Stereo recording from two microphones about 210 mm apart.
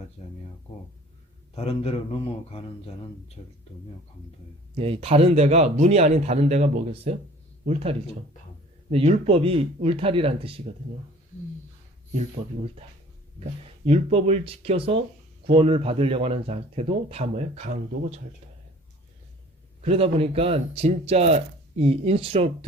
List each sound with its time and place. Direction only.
0.2 s a sound: 30° left (ahead or behind)
1.5 s a man's voice: 30° left (ahead or behind)
4.7 s speech: 25° right (ahead or behind)
13.8 s speech: 30° right (ahead or behind)
19.8 s speech: 25° right (ahead or behind)